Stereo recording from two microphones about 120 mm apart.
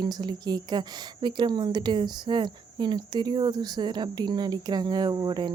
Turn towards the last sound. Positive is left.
turn(degrees=-35)  # may be behind; listen again after turning